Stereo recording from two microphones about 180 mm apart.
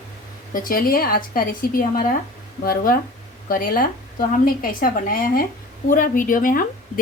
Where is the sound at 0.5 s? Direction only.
50° left (ahead or behind).